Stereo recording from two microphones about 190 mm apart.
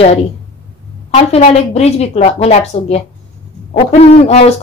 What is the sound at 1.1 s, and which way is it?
Speech, 35° left (ahead or behind).